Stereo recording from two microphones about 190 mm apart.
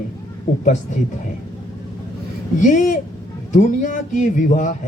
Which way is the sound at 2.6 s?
40° left (ahead or behind).